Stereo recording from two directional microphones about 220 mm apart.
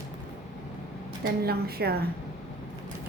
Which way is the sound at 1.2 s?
45° right (ahead or behind).